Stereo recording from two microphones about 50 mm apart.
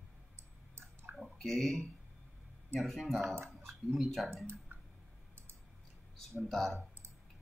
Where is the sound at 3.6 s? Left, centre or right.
Right.